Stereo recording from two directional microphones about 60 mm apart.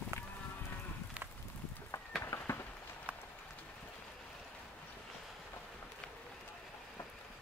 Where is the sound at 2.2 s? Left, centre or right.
Left.